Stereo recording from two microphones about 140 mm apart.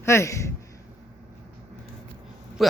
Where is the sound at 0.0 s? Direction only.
20° left (ahead or behind).